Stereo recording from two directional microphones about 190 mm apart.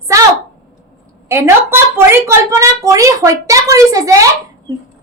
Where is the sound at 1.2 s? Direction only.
15° right (ahead or behind).